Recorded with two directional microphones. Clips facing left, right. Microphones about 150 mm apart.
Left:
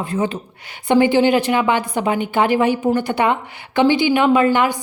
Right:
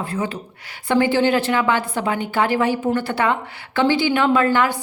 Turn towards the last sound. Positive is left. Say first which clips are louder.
# left 2 dB
turn(degrees=15)  # may be behind; listen again after turning